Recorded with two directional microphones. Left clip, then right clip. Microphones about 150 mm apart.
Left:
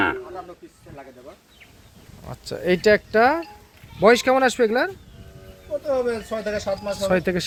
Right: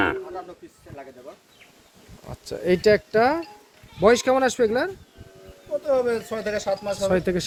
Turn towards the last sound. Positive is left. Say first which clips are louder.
# left 1 dB
turn(degrees=5)  # may be behind; listen again after turning